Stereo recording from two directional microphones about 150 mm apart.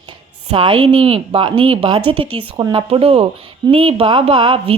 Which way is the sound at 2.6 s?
25° right (ahead or behind).